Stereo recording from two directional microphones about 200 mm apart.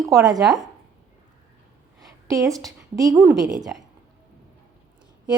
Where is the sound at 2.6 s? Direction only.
15° right (ahead or behind).